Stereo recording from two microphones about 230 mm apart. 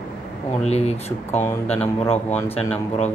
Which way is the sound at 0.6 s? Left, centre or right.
Left.